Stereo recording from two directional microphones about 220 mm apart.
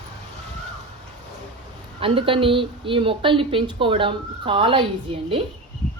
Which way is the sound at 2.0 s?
25° right (ahead or behind).